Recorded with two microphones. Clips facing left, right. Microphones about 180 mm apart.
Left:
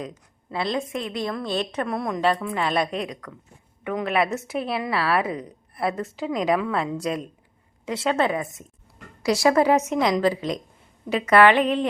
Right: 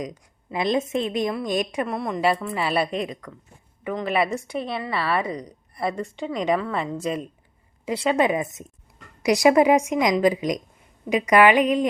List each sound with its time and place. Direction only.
0.5 s a woman's voice: 20° right (ahead or behind)
1.9 s a woman's voice: centre (ahead or behind)